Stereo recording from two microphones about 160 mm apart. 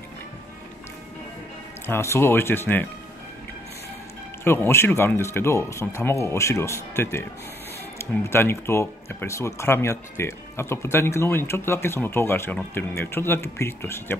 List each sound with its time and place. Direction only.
1.9 s speech: 15° left (ahead or behind)
4.5 s speech: 15° left (ahead or behind)